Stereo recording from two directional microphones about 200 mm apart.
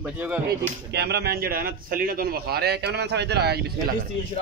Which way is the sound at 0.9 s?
55° right (ahead or behind).